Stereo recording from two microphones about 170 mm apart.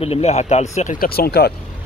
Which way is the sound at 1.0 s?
65° left (ahead or behind).